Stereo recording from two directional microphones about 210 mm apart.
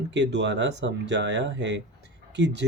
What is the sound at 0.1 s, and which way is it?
Speech, 55° right (ahead or behind).